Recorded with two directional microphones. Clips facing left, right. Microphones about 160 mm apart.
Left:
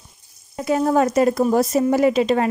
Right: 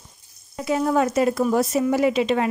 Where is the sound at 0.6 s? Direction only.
45° left (ahead or behind).